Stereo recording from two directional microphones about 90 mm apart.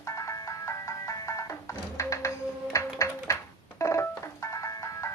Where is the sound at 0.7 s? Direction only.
35° left (ahead or behind).